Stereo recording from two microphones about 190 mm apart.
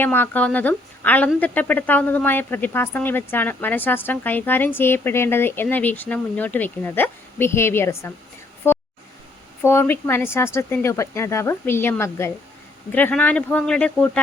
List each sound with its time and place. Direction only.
0.0 s speech: 10° left (ahead or behind)
8.7 s a sound: 10° left (ahead or behind)
9.6 s speech: 10° left (ahead or behind)